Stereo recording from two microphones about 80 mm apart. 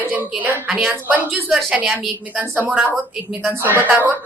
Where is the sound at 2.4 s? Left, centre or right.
Right.